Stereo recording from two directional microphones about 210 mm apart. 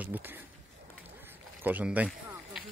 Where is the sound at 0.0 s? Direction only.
10° right (ahead or behind).